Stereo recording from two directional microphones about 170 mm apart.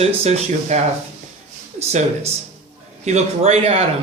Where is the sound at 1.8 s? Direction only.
40° right (ahead or behind).